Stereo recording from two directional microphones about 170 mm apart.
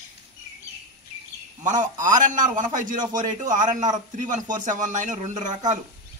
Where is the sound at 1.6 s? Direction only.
45° right (ahead or behind).